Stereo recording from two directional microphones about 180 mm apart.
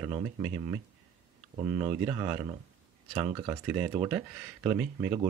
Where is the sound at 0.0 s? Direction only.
25° right (ahead or behind).